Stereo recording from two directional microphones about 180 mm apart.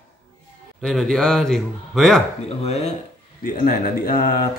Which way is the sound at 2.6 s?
35° left (ahead or behind).